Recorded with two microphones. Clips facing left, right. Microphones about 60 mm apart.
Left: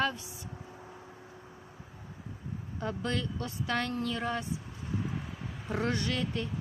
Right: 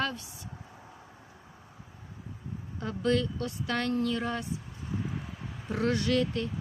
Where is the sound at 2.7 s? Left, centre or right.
Centre.